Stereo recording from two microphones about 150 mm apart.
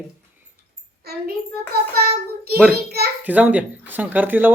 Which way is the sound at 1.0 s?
90° right.